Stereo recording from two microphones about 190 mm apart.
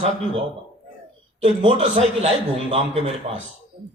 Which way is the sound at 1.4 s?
30° right (ahead or behind).